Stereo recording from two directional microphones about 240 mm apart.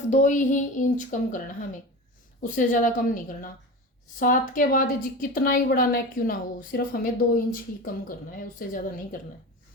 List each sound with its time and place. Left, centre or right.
0.1 s a woman's voice: left
2.4 s a woman's voice: left